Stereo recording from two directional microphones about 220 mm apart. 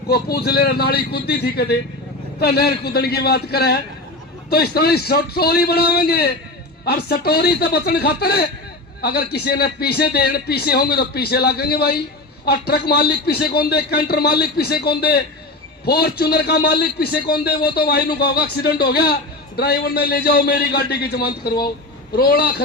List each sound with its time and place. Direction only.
0.1 s a man's voice: 45° left (ahead or behind)